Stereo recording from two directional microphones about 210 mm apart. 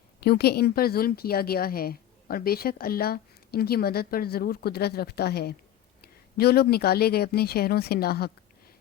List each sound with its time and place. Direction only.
0.2 s a woman's voice: 50° left (ahead or behind)